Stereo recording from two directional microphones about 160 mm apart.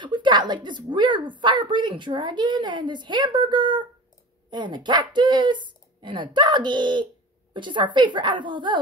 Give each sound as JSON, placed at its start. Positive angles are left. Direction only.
{"t": 0.0, "sound": "a woman's voice", "side_deg": -30}